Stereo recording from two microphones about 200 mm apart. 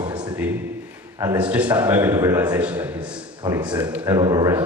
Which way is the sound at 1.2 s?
10° right (ahead or behind).